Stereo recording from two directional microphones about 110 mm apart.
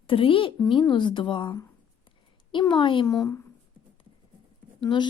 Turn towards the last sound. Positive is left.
turn(degrees=45)  # may be behind; listen again after turning